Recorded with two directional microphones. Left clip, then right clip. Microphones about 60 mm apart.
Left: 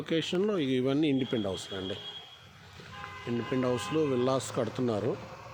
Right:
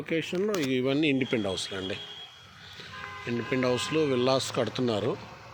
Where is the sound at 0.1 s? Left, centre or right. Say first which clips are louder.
Right 1 dB; left.